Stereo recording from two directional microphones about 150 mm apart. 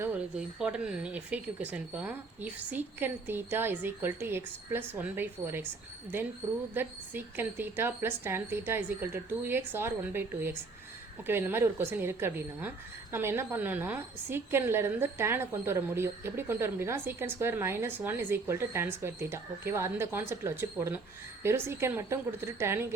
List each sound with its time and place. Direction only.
0.0 s a woman's voice: 10° right (ahead or behind)